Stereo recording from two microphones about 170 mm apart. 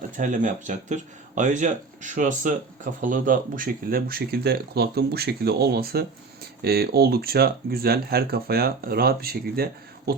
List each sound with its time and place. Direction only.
0.2 s speech: 45° right (ahead or behind); by 9.6 s 65° right (ahead or behind)